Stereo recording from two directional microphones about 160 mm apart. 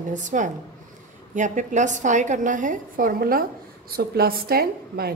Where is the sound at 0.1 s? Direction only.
50° right (ahead or behind).